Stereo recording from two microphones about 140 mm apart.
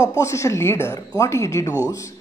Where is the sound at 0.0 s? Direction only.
20° left (ahead or behind).